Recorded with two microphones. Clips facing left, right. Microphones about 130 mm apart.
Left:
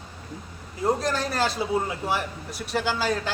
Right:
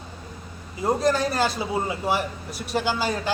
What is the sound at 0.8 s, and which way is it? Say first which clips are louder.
A man's voice: right 3 dB; centre (ahead or behind).